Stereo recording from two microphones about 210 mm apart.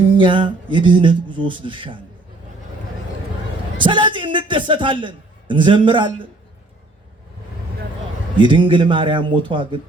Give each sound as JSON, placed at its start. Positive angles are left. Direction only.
{"t": 0.2, "sound": "speech", "side_deg": -25}
{"t": 3.8, "sound": "a man's voice", "side_deg": -25}
{"t": 8.4, "sound": "speech", "side_deg": -25}